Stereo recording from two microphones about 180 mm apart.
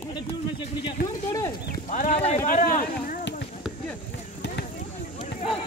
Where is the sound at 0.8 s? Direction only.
20° left (ahead or behind).